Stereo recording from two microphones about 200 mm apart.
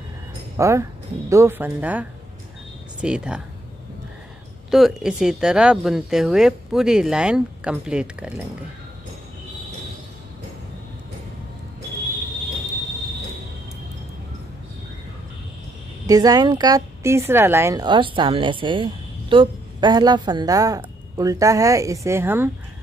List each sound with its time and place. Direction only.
0.6 s speech: 15° right (ahead or behind)
4.6 s speech: centre (ahead or behind)
16.1 s speech: 20° right (ahead or behind)